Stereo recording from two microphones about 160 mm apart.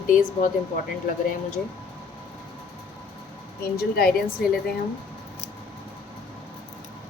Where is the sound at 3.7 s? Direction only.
70° left (ahead or behind).